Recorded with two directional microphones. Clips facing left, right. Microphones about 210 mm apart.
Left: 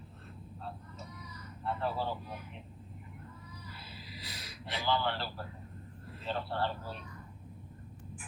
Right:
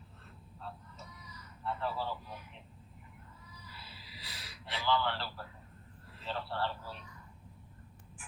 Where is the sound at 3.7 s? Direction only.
50° left (ahead or behind).